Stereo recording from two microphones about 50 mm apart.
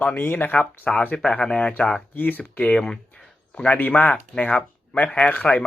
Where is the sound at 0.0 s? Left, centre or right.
Left.